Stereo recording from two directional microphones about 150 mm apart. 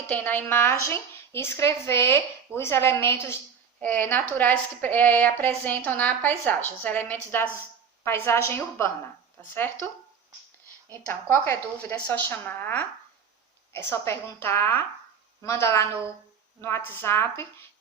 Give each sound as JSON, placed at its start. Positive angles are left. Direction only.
{"t": 0.1, "sound": "a woman's voice", "side_deg": 10}
{"t": 11.1, "sound": "a woman's voice", "side_deg": 15}